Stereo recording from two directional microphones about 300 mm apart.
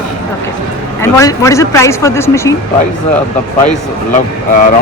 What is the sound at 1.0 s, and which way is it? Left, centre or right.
Speech, centre.